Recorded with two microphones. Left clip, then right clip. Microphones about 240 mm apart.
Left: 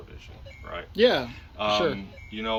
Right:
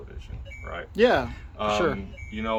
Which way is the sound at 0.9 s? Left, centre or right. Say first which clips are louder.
Right 1 dB; centre.